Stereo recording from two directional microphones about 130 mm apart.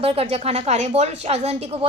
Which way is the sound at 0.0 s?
50° right (ahead or behind).